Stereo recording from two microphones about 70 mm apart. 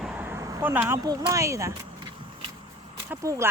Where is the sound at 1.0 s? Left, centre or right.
Right.